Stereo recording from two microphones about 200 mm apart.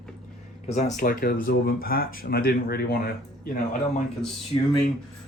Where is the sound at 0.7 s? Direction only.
35° left (ahead or behind).